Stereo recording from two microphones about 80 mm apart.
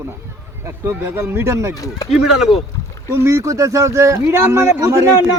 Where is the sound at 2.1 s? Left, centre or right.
Centre.